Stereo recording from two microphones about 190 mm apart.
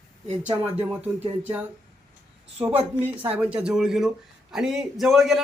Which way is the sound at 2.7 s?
30° right (ahead or behind).